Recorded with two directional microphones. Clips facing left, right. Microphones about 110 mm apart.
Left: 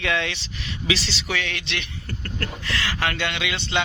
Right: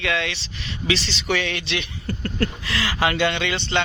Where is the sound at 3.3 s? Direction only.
5° left (ahead or behind).